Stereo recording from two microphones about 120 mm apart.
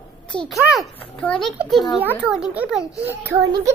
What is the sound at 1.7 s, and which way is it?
A child's voice, centre (ahead or behind).